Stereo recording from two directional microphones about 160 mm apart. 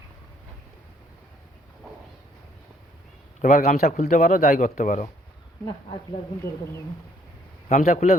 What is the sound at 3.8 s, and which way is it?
Speech, 45° left (ahead or behind).